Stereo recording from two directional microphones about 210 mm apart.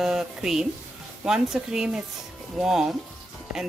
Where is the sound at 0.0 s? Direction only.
Centre (ahead or behind).